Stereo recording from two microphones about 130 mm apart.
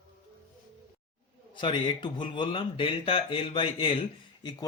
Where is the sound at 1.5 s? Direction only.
40° left (ahead or behind).